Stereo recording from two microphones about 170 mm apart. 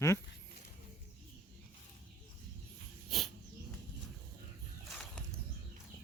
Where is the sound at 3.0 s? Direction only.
Centre (ahead or behind).